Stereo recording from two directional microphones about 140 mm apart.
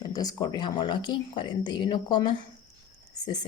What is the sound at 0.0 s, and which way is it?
A woman's voice, 25° left (ahead or behind).